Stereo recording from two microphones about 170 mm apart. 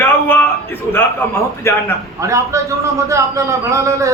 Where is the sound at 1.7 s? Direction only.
15° left (ahead or behind).